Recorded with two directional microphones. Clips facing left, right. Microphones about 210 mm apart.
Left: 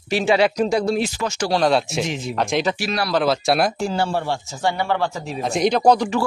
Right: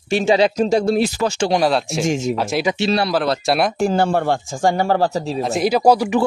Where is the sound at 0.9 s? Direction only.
40° right (ahead or behind).